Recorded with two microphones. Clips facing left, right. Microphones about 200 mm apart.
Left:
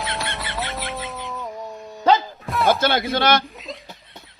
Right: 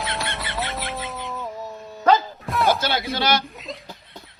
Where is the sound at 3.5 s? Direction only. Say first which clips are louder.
Even; centre (ahead or behind).